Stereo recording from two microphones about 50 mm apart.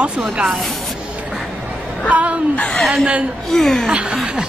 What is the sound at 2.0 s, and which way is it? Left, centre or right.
Speech, right.